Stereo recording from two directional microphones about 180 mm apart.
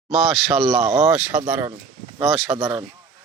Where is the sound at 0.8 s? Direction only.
35° right (ahead or behind).